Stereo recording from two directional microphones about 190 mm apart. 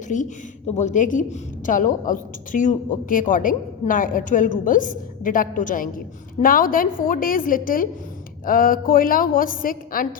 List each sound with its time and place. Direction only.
0.1 s a woman's voice: 40° left (ahead or behind)